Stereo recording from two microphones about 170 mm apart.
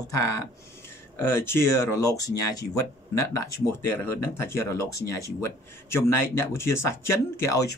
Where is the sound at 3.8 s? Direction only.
15° left (ahead or behind).